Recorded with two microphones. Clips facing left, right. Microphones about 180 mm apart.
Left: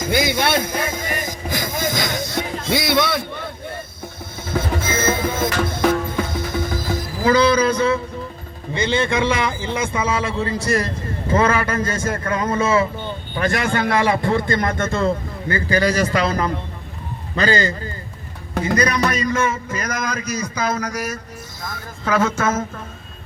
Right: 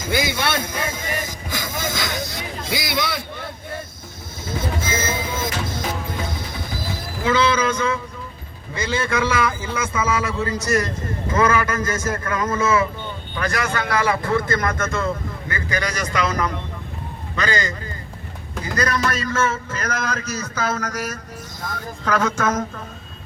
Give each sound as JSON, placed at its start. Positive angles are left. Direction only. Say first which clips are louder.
{"t": 0.1, "sound": "a man's voice", "louder": "left 3 dB", "side_deg": 15}
{"t": 1.2, "sound": "boat", "louder": "left 4 dB", "side_deg": 15}
{"t": 1.9, "sound": "vehicle", "louder": "left 3 dB", "side_deg": 40}
{"t": 2.3, "sound": "a sound", "louder": "left 6 dB", "side_deg": 55}
{"t": 4.5, "sound": "music", "louder": "left 3 dB", "side_deg": 55}
{"t": 7.3, "sound": "a man's voice", "louder": "left 4 dB", "side_deg": 40}
{"t": 18.6, "sound": "a man's voice", "louder": "left 3 dB", "side_deg": 20}